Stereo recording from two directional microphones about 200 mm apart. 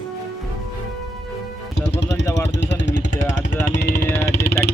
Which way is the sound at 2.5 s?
60° left (ahead or behind).